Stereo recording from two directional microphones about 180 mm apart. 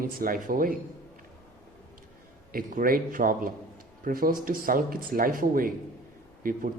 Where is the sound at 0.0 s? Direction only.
55° right (ahead or behind).